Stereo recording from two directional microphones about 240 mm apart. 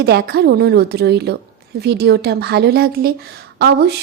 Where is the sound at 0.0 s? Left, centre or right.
Right.